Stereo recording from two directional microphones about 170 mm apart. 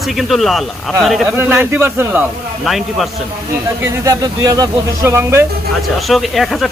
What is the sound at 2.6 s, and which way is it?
Speech, centre (ahead or behind).